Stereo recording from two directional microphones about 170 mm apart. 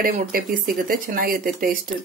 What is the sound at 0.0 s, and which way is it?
Speech, 60° right (ahead or behind).